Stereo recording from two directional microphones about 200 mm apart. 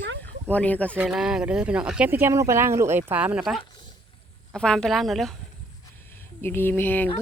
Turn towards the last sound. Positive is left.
turn(degrees=10)  # may be behind; listen again after turning